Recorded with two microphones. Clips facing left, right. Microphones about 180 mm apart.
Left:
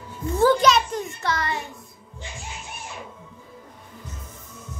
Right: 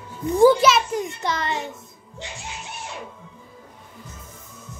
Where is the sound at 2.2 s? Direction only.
75° right (ahead or behind).